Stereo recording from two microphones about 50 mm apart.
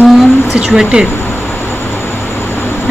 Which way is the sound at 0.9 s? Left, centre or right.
Right.